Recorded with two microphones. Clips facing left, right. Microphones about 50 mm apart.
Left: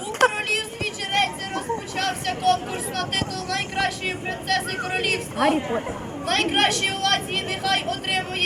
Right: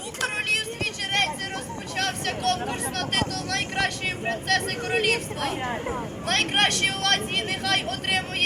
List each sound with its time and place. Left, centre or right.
0.2 s music: left
1.1 s a woman's voice: centre